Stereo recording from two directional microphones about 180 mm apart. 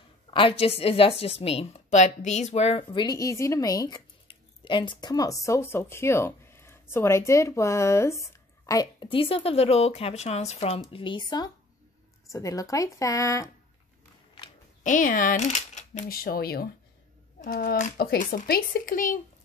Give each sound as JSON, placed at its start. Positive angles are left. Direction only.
{"t": 0.3, "sound": "a woman's voice", "side_deg": 30}
{"t": 14.8, "sound": "speech", "side_deg": 45}